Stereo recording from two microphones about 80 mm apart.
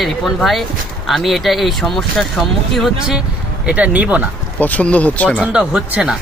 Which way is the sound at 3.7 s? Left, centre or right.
Centre.